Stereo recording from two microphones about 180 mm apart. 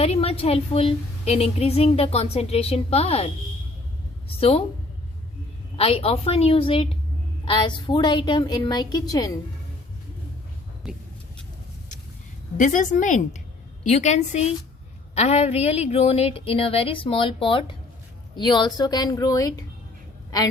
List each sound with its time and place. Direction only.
0.0 s a woman's voice: 35° left (ahead or behind)
4.4 s a woman's voice: 30° left (ahead or behind)
5.7 s a woman's voice: 30° left (ahead or behind)
10.8 s speech: centre (ahead or behind)
12.5 s a woman's voice: 45° left (ahead or behind); by 19.6 s 20° left (ahead or behind)